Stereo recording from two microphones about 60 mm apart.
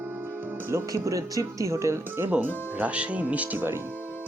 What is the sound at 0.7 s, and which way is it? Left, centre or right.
Speech, right.